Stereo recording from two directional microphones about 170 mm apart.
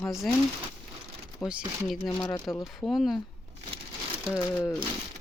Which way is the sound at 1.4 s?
5° right (ahead or behind).